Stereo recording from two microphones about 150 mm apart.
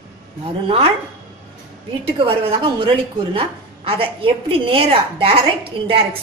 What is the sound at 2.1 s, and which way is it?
A woman's voice, 35° right (ahead or behind).